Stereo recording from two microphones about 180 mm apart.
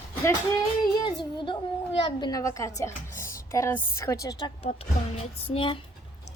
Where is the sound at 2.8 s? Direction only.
15° left (ahead or behind).